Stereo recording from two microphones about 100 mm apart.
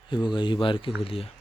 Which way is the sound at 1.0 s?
70° left (ahead or behind).